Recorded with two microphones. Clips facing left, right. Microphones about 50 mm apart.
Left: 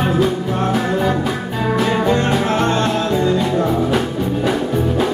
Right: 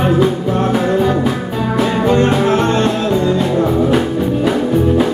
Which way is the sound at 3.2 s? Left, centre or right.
Centre.